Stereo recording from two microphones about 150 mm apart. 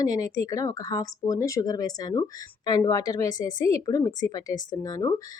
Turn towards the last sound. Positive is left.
turn(degrees=25)  # may be behind; listen again after turning